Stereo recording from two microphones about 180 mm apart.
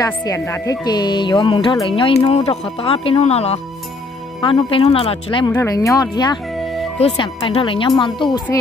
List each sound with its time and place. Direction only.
0.0 s speech: 20° left (ahead or behind)
5.5 s speech: 15° left (ahead or behind)